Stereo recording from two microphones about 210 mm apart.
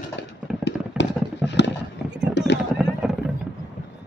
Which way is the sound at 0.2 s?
60° left (ahead or behind).